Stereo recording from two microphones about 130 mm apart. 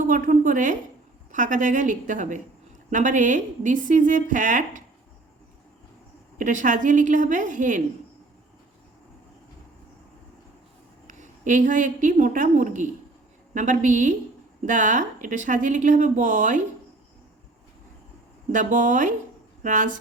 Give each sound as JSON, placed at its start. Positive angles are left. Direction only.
{"t": 0.0, "sound": "a woman's voice", "side_deg": -90}
{"t": 6.4, "sound": "a woman's voice", "side_deg": -80}
{"t": 11.0, "sound": "a woman's voice", "side_deg": -75}
{"t": 18.5, "sound": "a woman's voice", "side_deg": -85}